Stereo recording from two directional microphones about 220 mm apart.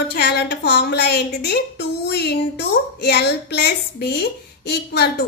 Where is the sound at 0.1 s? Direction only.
50° left (ahead or behind).